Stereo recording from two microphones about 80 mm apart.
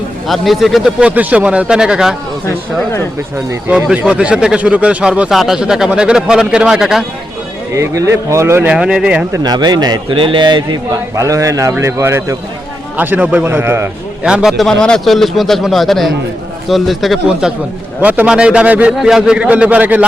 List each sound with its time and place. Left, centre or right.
0.3 s a man's voice: centre
0.9 s speech: centre
3.7 s speech: centre
5.3 s a man's voice: centre
7.7 s a man's voice: right
8.6 s speech: centre
9.4 s a man's voice: right
11.1 s a man's voice: right
13.0 s a man's voice: centre
14.3 s speech: centre
14.5 s a man's voice: centre
18.0 s a man's voice: right
18.3 s speech: centre
18.9 s speech: centre